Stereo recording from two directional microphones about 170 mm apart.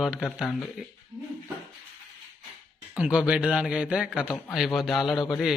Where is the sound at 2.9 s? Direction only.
5° right (ahead or behind).